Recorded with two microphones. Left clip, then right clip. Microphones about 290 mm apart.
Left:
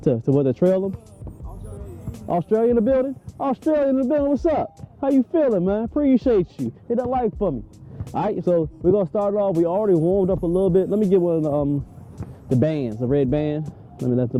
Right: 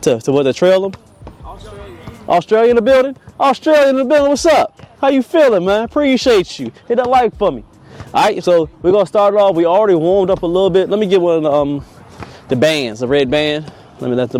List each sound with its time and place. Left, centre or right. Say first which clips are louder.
0.0 s speech: right 7 dB; centre
1.8 s a man's voice: right 7 dB; centre
10.4 s speech: right 7 dB; right
10.7 s speech: right 5 dB; centre